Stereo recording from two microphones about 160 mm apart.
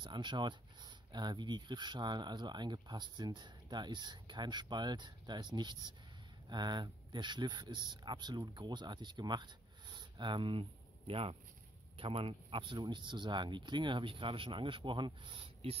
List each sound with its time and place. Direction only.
0.0 s speech: 30° right (ahead or behind)